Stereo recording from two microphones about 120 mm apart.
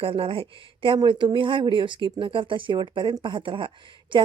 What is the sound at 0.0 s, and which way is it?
Speech, 50° right (ahead or behind).